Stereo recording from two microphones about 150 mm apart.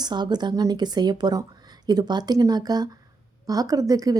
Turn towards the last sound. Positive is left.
turn(degrees=-25)  # may be behind; listen again after turning